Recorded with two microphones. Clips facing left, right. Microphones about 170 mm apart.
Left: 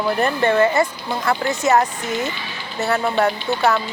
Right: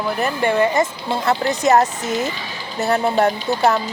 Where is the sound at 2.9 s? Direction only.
30° right (ahead or behind).